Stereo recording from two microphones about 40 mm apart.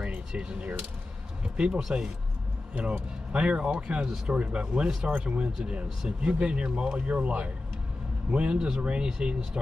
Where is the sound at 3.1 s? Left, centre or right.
Right; by 4.3 s centre.